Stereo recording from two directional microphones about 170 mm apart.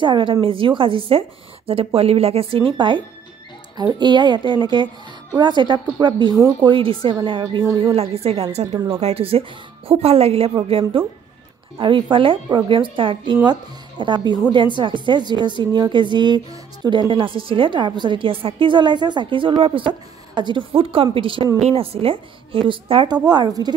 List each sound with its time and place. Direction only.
0.0 s a woman's voice: 30° right (ahead or behind)
4.0 s a woman's voice: 25° right (ahead or behind)
7.9 s a woman's voice: 35° right (ahead or behind)
8.7 s a woman's voice: 25° right (ahead or behind)
9.0 s a woman's voice: 35° right (ahead or behind)